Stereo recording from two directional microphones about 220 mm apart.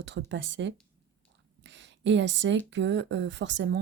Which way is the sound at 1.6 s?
55° right (ahead or behind).